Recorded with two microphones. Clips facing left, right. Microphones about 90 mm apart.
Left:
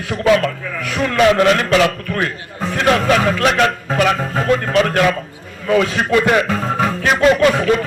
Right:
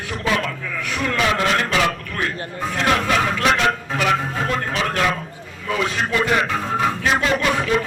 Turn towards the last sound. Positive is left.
turn(degrees=55)  # may be behind; listen again after turning